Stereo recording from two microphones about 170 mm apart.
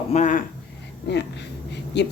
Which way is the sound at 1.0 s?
85° left.